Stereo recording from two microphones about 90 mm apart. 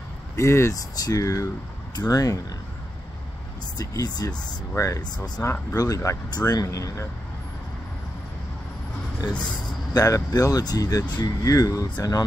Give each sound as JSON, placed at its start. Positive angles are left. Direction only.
{"t": 0.4, "sound": "speech", "side_deg": 30}
{"t": 0.7, "sound": "speech", "side_deg": 45}
{"t": 3.7, "sound": "speech", "side_deg": 45}
{"t": 4.7, "sound": "speech", "side_deg": 35}
{"t": 9.9, "sound": "speech", "side_deg": 40}